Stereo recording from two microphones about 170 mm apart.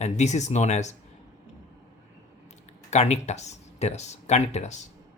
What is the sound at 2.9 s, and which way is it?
Speech, 40° left (ahead or behind).